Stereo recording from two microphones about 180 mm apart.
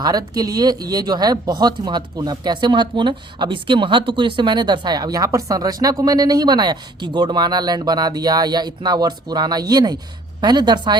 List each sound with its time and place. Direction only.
0.0 s speech: 20° right (ahead or behind)